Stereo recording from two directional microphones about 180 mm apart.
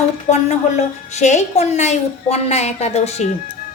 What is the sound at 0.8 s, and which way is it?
A woman's voice, 40° left (ahead or behind).